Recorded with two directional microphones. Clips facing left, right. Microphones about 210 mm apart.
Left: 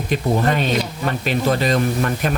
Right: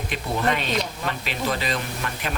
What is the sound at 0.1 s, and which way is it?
Speech, 40° left (ahead or behind).